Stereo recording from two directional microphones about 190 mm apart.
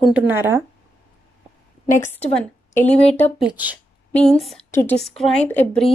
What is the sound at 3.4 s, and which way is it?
A woman's voice, 5° right (ahead or behind).